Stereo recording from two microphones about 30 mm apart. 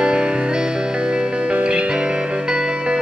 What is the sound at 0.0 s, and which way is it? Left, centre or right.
Music, right.